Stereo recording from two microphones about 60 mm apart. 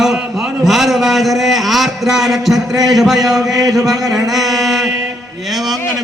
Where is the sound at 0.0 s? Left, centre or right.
Centre.